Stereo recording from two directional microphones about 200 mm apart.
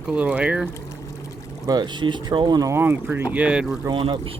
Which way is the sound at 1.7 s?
20° right (ahead or behind).